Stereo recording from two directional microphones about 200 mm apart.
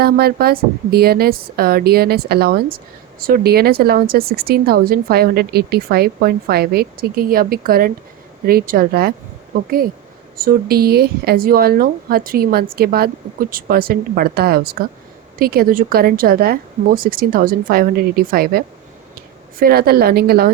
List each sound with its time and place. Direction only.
0.0 s a woman's voice: 50° right (ahead or behind)